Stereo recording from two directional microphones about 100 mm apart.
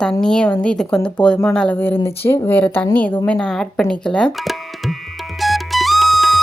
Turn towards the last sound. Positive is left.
turn(degrees=0)  # may be behind; listen again after turning